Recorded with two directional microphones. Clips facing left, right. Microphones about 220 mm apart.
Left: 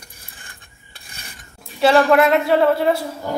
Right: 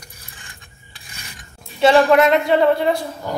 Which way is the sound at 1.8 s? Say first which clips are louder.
Right 1 dB; centre (ahead or behind).